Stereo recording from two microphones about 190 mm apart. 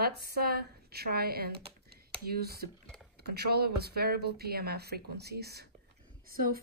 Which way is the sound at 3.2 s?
55° right (ahead or behind).